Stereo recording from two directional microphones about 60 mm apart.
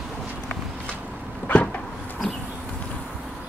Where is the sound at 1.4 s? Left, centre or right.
Left.